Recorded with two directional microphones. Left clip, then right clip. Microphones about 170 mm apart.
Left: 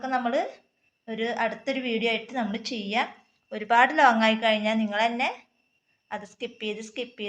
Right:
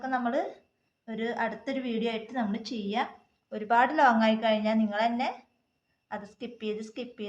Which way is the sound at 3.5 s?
5° left (ahead or behind).